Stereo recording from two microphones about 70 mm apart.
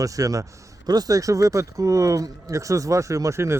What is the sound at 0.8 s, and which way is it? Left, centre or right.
Speech, right.